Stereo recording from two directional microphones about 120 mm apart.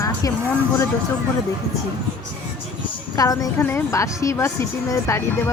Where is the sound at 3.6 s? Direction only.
20° left (ahead or behind).